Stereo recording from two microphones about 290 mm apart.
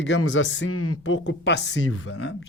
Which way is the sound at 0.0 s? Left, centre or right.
Left.